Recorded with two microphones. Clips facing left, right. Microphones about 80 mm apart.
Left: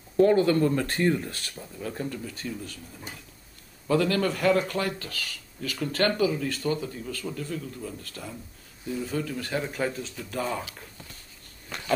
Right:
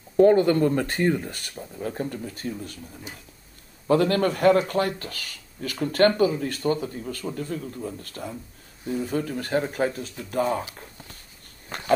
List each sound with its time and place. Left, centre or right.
0.2 s speech: right
1.8 s speech: right
3.8 s speech: right
10.6 s speech: right
11.7 s a sound: right